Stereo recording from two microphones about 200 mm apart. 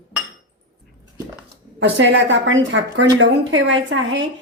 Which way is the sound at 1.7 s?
65° right (ahead or behind).